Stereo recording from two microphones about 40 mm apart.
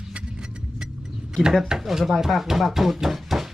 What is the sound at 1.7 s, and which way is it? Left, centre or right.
Speech, centre.